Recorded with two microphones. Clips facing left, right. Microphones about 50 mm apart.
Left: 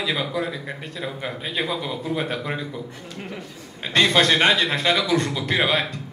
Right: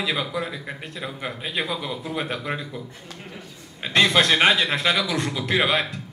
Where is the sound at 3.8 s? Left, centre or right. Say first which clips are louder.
Even; centre.